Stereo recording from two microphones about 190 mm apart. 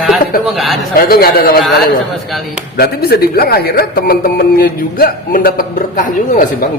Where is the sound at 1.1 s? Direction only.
50° left (ahead or behind).